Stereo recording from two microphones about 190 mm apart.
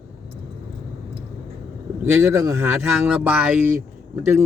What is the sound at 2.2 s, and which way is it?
A man's voice, 15° right (ahead or behind).